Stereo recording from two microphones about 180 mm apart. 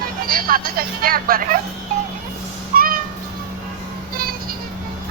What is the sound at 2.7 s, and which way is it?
Music, 55° right (ahead or behind).